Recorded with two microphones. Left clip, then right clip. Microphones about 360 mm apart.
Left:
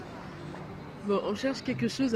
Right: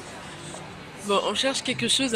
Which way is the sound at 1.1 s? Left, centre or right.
Centre.